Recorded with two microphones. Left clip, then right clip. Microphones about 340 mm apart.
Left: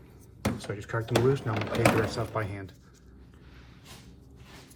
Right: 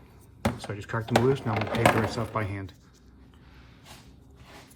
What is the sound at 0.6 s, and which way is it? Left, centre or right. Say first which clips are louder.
Speech: even; right.